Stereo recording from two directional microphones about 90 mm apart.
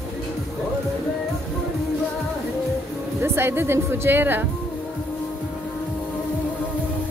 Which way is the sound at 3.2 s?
25° right (ahead or behind).